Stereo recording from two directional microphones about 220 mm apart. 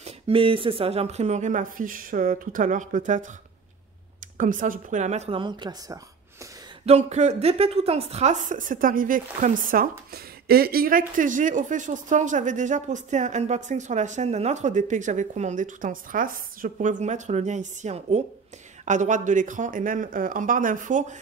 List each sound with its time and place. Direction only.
0.0 s a woman's voice: 25° right (ahead or behind)
4.4 s a woman's voice: 35° right (ahead or behind); by 5.9 s 20° right (ahead or behind)
6.9 s a woman's voice: 30° right (ahead or behind)